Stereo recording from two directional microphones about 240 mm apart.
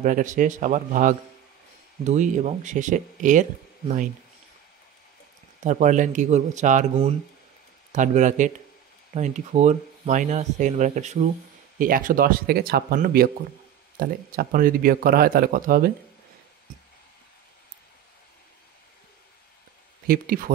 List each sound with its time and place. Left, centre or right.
0.0 s speech: right
5.6 s speech: right
20.1 s speech: right